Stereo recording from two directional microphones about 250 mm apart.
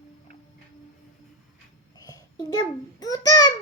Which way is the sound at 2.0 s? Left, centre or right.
Centre.